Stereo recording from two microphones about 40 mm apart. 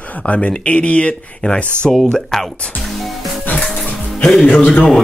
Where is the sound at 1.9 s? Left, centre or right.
Centre.